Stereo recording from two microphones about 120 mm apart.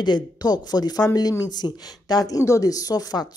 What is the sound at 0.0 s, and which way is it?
A woman's voice, 35° left (ahead or behind).